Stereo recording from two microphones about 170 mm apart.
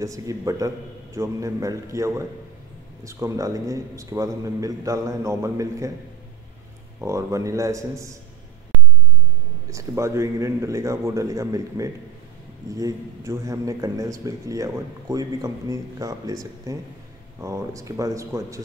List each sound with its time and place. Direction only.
0.0 s a man's voice: 20° right (ahead or behind)
7.0 s a man's voice: 20° right (ahead or behind)
9.7 s a man's voice: 15° right (ahead or behind)